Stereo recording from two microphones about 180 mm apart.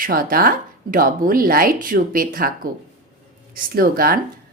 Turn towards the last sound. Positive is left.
turn(degrees=-55)  # may be behind; listen again after turning